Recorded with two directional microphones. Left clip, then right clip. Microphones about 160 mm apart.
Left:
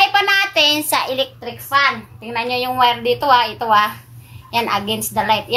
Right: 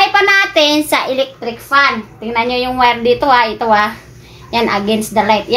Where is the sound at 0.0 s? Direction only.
30° right (ahead or behind).